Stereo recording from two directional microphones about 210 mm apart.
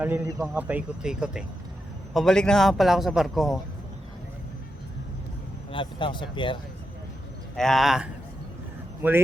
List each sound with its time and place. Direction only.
0.0 s speech: 10° right (ahead or behind)
5.7 s speech: 25° left (ahead or behind)
7.5 s speech: centre (ahead or behind)